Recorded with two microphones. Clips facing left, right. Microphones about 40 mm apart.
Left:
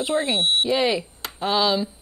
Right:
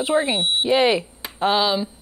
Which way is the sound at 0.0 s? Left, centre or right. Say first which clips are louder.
Right 2 dB; right.